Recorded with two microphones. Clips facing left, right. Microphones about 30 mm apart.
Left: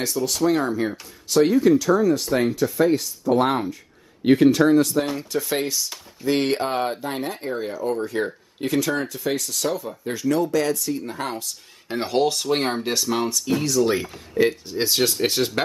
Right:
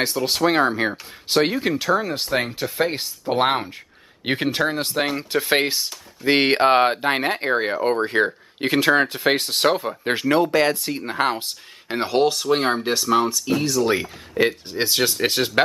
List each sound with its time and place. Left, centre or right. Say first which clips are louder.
0.0 s speech: right 2 dB; right
11.9 s speech: right 2 dB; right
12.3 s speech: right 3 dB; centre
13.7 s speech: left 2 dB; right
15.2 s speech: right 2 dB; right